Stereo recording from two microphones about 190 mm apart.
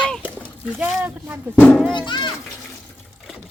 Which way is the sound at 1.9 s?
25° left (ahead or behind).